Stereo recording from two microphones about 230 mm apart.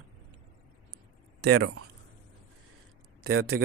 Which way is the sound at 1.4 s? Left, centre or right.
Right.